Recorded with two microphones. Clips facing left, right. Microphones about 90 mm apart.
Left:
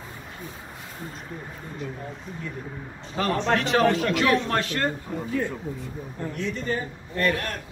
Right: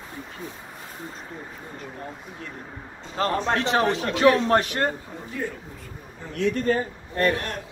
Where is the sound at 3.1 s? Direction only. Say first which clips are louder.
Even; 25° right (ahead or behind).